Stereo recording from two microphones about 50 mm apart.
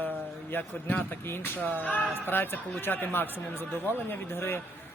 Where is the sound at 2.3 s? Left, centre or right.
Left.